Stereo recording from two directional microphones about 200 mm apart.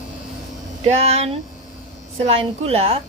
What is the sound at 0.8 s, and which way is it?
A woman's voice, 30° right (ahead or behind).